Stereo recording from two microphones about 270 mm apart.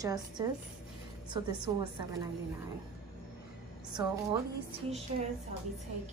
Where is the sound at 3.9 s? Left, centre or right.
Centre.